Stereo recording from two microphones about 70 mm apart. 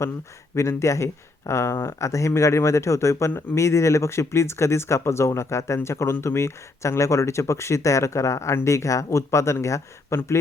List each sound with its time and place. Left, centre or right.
0.5 s speech: left